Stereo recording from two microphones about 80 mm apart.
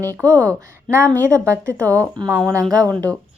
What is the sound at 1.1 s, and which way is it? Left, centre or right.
Speech, right.